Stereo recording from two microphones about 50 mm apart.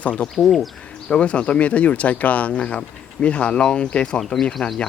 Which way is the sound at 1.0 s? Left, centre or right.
Left.